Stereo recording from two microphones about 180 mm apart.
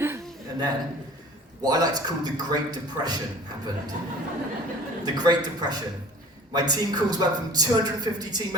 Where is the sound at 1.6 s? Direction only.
20° right (ahead or behind).